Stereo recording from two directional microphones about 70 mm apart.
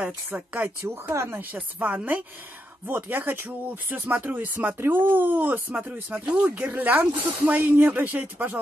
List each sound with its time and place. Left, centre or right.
0.0 s speech: right
1.0 s speech: right
1.5 s speech: right